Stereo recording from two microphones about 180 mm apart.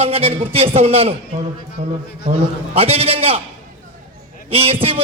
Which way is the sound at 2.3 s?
35° right (ahead or behind).